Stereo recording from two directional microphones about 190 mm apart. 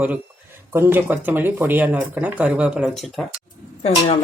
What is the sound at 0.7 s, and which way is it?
Speech, 10° right (ahead or behind).